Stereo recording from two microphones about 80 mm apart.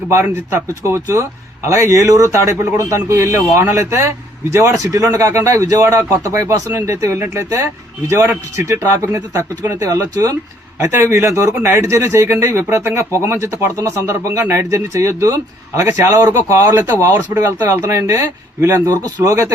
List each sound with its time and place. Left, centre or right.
0.1 s a man's voice: right